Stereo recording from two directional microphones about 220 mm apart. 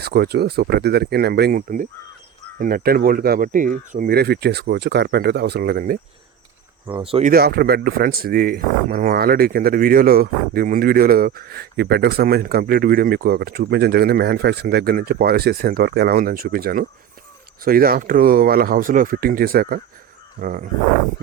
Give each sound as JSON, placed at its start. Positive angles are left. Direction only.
{"t": 0.0, "sound": "speech", "side_deg": -45}
{"t": 7.0, "sound": "speech", "side_deg": -25}
{"t": 7.3, "sound": "speech", "side_deg": -45}